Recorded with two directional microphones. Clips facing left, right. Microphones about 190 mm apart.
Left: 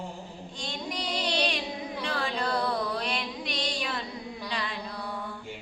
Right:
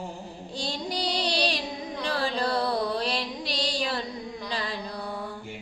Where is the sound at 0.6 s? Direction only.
35° right (ahead or behind).